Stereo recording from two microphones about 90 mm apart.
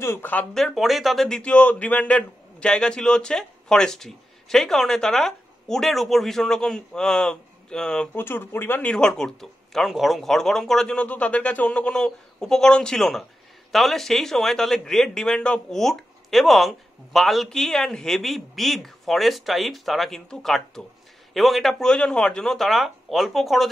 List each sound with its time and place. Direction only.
0.0 s speech: 30° left (ahead or behind)
0.6 s a man's voice: centre (ahead or behind)
1.4 s a man's voice: 15° left (ahead or behind)
8.1 s speech: 25° left (ahead or behind)
8.9 s a man's voice: 10° left (ahead or behind)